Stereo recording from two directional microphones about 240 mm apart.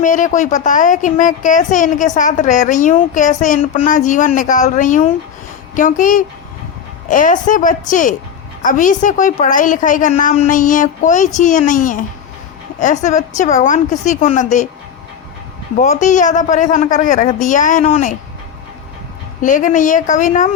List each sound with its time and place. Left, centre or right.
0.0 s a woman's voice: left
15.8 s a woman's voice: left
19.4 s a woman's voice: left